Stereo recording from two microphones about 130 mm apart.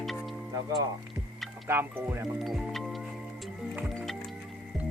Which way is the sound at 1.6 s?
15° right (ahead or behind).